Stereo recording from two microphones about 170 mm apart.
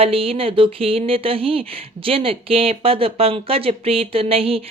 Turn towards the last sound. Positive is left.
turn(degrees=-35)  # may be behind; listen again after turning